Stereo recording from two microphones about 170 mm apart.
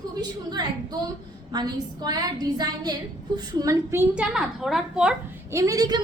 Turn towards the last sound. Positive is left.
turn(degrees=-20)  # may be behind; listen again after turning